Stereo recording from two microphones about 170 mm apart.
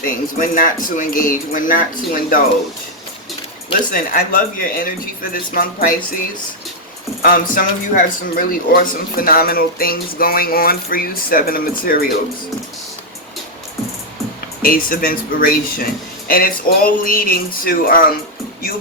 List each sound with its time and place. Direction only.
0.0 s speech: 55° left (ahead or behind)
3.9 s speech: 55° left (ahead or behind)
7.2 s speech: 55° left (ahead or behind)
14.6 s speech: 55° left (ahead or behind)